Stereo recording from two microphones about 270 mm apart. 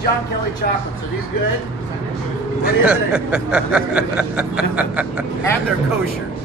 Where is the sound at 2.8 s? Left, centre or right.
Centre.